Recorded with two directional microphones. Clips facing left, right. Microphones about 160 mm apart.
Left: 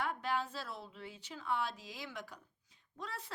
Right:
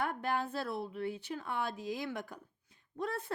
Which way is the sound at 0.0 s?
50° right (ahead or behind).